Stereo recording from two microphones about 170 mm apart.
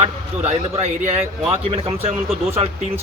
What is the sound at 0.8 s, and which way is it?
A man's voice, 40° right (ahead or behind).